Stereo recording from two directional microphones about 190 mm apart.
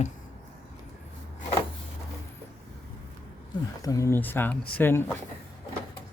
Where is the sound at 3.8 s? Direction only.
15° left (ahead or behind).